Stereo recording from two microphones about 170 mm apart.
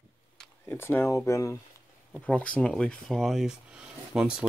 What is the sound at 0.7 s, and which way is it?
Speech, 15° left (ahead or behind).